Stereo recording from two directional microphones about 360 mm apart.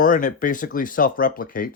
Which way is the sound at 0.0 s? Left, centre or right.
Left.